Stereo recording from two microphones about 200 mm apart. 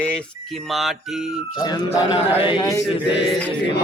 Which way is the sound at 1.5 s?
20° left (ahead or behind).